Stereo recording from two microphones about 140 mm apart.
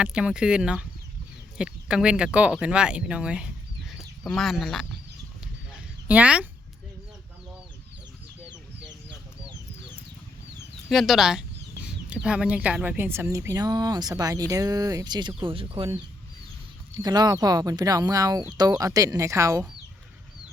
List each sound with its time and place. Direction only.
0.0 s speech: 5° right (ahead or behind)
6.1 s speech: 10° right (ahead or behind)
10.8 s speech: centre (ahead or behind); by 15.9 s 40° right (ahead or behind)
16.9 s speech: 30° right (ahead or behind)